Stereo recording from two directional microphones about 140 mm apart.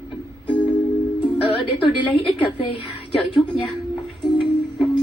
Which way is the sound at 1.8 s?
35° left (ahead or behind).